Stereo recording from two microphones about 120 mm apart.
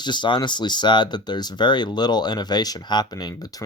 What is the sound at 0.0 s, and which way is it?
Speech, 40° left (ahead or behind).